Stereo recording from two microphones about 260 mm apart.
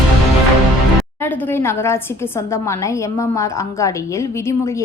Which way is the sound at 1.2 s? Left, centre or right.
Centre.